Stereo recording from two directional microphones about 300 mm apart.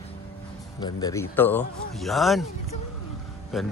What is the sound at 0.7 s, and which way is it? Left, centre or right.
Speech, centre.